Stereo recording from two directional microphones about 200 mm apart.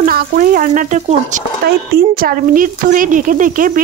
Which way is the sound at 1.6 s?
50° right (ahead or behind).